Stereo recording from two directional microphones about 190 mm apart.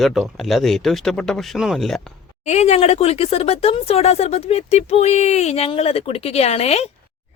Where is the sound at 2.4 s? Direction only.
35° left (ahead or behind).